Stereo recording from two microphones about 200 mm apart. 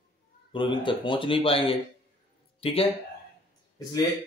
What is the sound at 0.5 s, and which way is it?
Speech, 25° left (ahead or behind).